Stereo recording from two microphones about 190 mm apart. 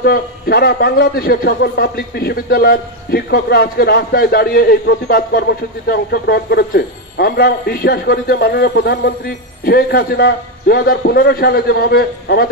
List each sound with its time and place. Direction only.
0.0 s speech: 55° left (ahead or behind)